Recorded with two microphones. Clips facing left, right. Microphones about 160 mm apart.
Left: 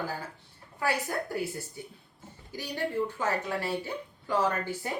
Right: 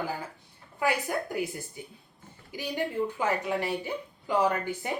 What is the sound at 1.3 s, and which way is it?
A woman's voice, 15° right (ahead or behind).